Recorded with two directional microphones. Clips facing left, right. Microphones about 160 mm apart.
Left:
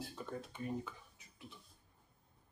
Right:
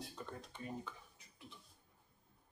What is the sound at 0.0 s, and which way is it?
Beatboxing, 5° left (ahead or behind).